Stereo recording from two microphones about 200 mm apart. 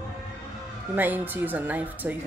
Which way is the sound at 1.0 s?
10° right (ahead or behind).